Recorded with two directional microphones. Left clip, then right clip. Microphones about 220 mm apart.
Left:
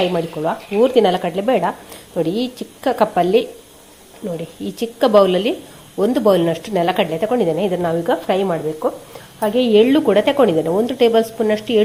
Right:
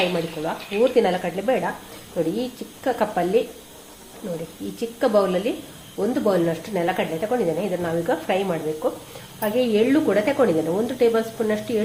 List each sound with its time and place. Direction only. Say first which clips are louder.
0.4 s a woman's voice: left 5 dB; 35° left (ahead or behind)
4.8 s a woman's voice: left 7 dB; 40° left (ahead or behind)